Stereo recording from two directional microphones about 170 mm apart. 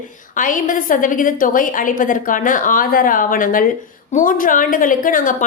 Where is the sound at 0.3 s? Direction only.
50° left (ahead or behind).